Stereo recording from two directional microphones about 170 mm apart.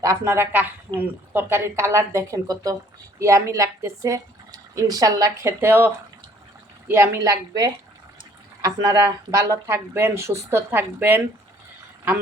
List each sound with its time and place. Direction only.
0.0 s speech: 15° right (ahead or behind)